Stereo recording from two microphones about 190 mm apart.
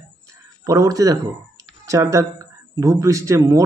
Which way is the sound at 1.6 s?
15° right (ahead or behind).